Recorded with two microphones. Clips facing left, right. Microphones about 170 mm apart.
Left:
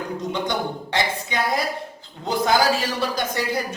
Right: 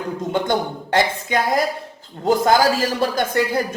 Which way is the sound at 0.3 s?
50° right (ahead or behind).